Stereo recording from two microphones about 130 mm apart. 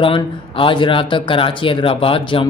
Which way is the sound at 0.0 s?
40° left (ahead or behind).